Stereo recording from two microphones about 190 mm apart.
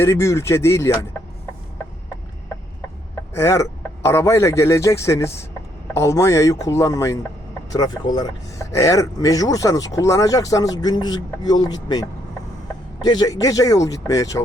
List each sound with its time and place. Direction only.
0.0 s speech: 15° left (ahead or behind)
3.3 s speech: 15° left (ahead or behind)